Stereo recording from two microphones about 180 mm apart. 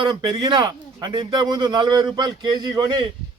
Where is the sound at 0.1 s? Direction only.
25° right (ahead or behind).